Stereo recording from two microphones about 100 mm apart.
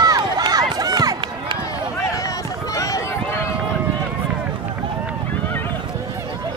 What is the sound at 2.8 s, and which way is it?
Run, 35° left (ahead or behind).